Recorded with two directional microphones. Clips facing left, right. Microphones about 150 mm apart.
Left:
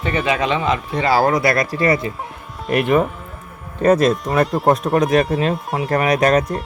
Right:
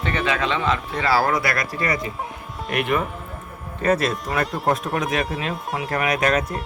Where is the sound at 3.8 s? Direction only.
40° left (ahead or behind).